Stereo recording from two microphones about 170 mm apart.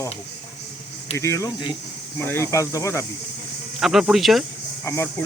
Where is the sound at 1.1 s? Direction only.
15° left (ahead or behind).